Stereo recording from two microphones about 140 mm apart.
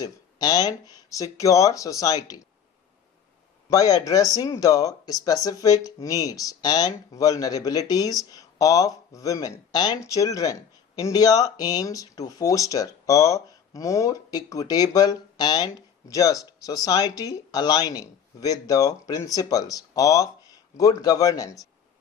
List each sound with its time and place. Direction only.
0.0 s speech: 30° left (ahead or behind)
3.7 s speech: 25° left (ahead or behind)